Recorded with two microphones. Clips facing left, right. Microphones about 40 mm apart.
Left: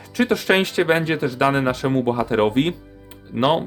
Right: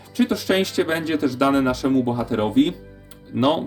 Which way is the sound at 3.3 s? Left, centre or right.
Left.